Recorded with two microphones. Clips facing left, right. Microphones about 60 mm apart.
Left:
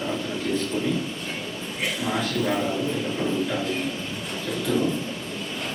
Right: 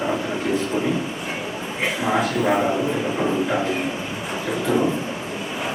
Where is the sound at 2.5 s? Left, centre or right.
Right.